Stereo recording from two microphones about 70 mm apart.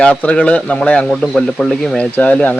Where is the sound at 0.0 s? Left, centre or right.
Centre.